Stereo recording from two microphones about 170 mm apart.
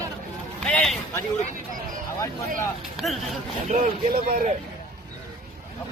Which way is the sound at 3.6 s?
55° right (ahead or behind).